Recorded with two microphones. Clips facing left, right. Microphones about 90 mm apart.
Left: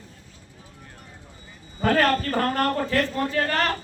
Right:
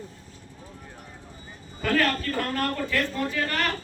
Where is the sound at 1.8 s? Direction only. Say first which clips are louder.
Left 4 dB; 35° left (ahead or behind).